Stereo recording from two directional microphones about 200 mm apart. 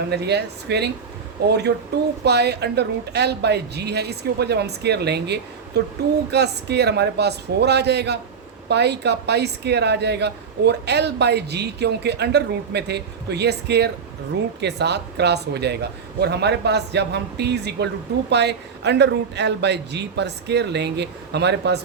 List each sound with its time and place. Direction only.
0.1 s speech: 55° right (ahead or behind)